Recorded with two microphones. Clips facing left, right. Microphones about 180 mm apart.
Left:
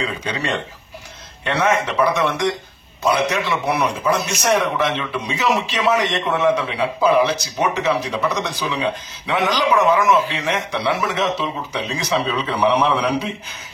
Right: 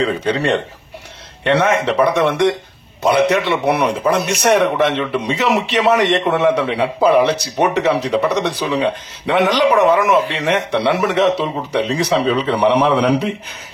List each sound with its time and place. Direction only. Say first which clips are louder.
0.0 s speech: right 8 dB; 55° right (ahead or behind)
1.6 s speech: right 1 dB; 60° right (ahead or behind)